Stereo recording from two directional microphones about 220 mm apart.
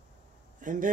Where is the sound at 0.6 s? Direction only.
35° right (ahead or behind).